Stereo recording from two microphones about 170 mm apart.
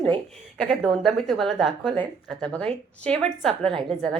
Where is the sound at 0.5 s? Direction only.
Centre (ahead or behind).